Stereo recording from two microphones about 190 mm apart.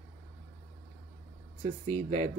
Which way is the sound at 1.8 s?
35° right (ahead or behind).